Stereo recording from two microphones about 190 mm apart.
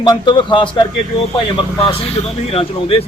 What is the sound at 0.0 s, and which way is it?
A man's voice, 25° left (ahead or behind).